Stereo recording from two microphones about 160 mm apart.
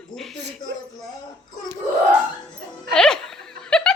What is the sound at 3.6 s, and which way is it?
Snicker, 5° left (ahead or behind).